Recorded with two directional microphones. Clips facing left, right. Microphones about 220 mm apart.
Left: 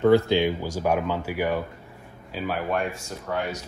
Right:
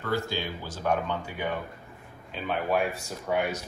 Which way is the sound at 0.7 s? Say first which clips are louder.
Left 4 dB; 10° left (ahead or behind).